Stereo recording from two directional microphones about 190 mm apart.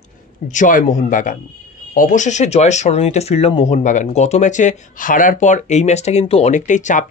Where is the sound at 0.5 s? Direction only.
45° left (ahead or behind).